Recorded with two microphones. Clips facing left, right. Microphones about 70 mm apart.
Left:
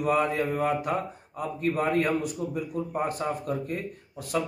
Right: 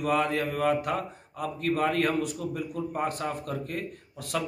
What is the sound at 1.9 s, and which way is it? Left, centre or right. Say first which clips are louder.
A man's voice: left 1 dB; right.